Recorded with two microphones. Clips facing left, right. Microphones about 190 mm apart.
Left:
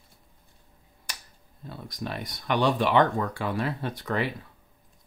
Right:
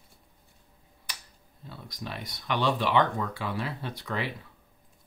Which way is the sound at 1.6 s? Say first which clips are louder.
Left 5 dB; 50° left (ahead or behind).